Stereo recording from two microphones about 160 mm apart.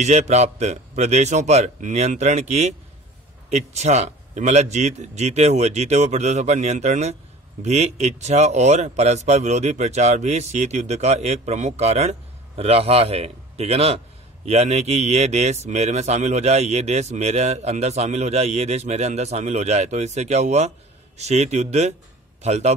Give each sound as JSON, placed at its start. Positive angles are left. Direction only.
{"t": 0.0, "sound": "speech", "side_deg": -45}